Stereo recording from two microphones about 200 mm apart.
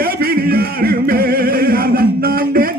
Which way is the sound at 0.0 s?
50° right (ahead or behind).